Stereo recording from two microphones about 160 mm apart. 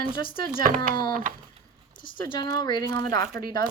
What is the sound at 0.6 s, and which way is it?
Speech, 60° right (ahead or behind).